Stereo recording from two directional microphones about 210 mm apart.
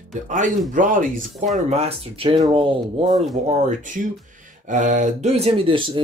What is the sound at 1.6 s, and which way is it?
Speech, 30° right (ahead or behind).